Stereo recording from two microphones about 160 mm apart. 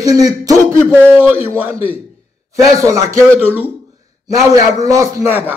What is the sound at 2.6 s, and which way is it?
Speech, 20° right (ahead or behind).